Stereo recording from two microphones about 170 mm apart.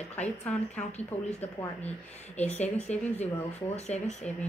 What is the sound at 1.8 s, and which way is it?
Speech, 40° left (ahead or behind).